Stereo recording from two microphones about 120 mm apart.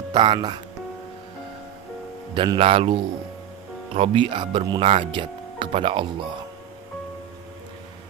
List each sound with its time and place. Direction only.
0.1 s speech: 40° right (ahead or behind)
2.3 s speech: 40° right (ahead or behind)